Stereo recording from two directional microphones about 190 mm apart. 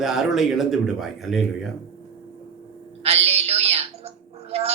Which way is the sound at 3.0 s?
30° right (ahead or behind).